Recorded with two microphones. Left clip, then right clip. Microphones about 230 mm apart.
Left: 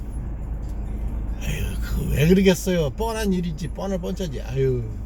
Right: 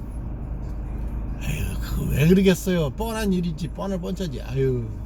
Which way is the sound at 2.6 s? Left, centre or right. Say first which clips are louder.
Left 2 dB; centre.